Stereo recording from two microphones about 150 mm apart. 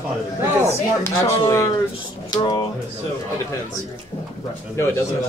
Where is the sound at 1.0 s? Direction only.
20° left (ahead or behind).